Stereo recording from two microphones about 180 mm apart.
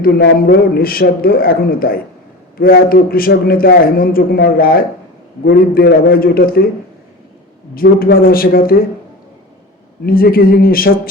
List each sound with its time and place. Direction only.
0.0 s a man's voice: 60° left (ahead or behind)
7.8 s a man's voice: 55° left (ahead or behind)
10.1 s a man's voice: 55° left (ahead or behind)